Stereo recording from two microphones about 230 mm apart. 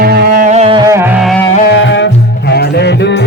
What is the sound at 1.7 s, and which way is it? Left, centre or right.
Music, left.